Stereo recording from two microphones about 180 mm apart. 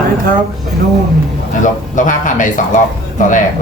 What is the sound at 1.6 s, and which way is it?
Speech, 45° left (ahead or behind).